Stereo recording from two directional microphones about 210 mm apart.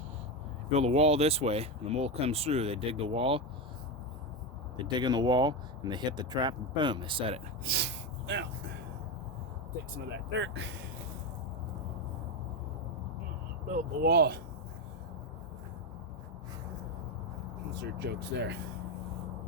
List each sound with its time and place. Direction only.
0.7 s speech: 30° right (ahead or behind)
4.8 s speech: 20° right (ahead or behind)
7.6 s gasp: 50° right (ahead or behind)
10.1 s speech: 60° right (ahead or behind)
13.7 s speech: 45° right (ahead or behind)
17.7 s speech: 50° right (ahead or behind)